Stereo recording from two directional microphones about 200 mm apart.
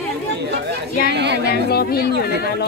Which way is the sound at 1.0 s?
55° right (ahead or behind).